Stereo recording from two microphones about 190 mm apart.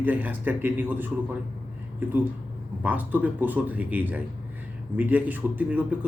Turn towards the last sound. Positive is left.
turn(degrees=-10)  # may be behind; listen again after turning